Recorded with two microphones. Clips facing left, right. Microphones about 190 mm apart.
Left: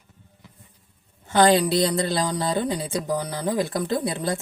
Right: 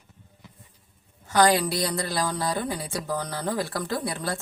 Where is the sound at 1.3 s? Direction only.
25° left (ahead or behind).